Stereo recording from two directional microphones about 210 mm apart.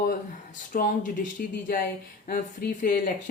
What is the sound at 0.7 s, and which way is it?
Speech, 40° left (ahead or behind).